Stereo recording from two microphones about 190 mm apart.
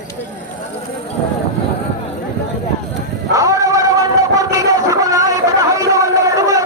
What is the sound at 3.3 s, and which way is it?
Music, 15° right (ahead or behind).